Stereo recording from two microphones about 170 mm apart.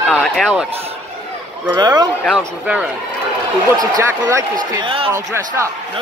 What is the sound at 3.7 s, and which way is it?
Speech, 20° right (ahead or behind).